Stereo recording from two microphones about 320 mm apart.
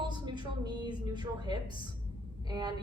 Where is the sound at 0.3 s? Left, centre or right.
Centre.